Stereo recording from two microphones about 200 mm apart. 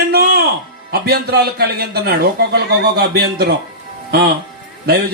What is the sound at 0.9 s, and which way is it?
Speech, 50° right (ahead or behind).